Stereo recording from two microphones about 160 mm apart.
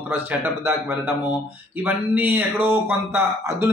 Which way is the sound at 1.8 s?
10° right (ahead or behind).